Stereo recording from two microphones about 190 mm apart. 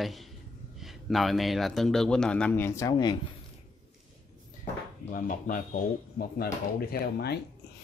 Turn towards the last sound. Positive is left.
turn(degrees=60)  # may be behind; listen again after turning